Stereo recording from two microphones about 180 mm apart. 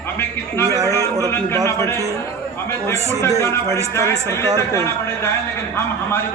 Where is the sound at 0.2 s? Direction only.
15° left (ahead or behind).